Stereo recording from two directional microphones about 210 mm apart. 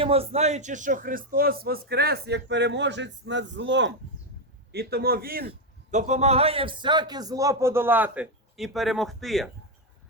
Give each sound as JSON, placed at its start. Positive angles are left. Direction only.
{"t": 0.0, "sound": "speech", "side_deg": -30}
{"t": 5.5, "sound": "a man's voice", "side_deg": -35}